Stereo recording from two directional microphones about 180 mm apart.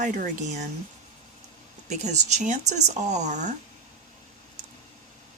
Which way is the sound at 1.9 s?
40° right (ahead or behind).